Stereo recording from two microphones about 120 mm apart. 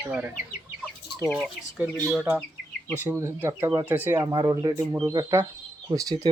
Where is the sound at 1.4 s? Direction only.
5° right (ahead or behind).